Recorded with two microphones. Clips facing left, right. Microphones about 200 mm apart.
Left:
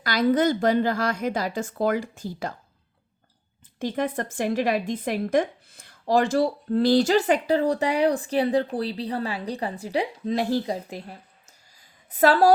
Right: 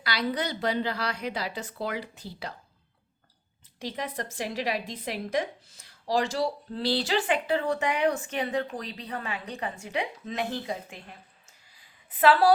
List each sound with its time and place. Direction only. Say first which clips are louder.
0.0 s a woman's voice: left 9 dB; 45° left (ahead or behind)
3.8 s a woman's voice: left 8 dB; 50° left (ahead or behind)